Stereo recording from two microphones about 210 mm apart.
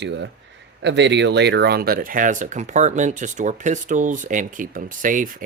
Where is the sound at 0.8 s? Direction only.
55° right (ahead or behind).